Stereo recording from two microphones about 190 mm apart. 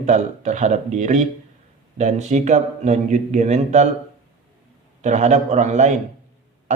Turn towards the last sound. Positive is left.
turn(degrees=-40)  # may be behind; listen again after turning